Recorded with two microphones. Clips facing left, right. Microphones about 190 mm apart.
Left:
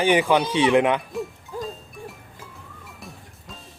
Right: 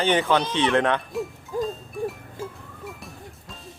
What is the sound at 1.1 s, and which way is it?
Hoot, centre (ahead or behind).